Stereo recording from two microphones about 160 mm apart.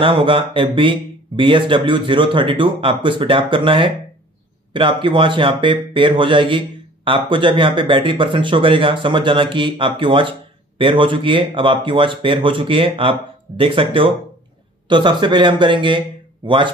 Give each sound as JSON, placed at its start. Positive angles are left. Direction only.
{"t": 0.0, "sound": "speech", "side_deg": -30}